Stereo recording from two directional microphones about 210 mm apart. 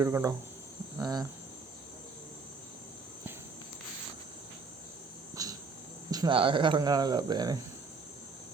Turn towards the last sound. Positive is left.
turn(degrees=-20)  # may be behind; listen again after turning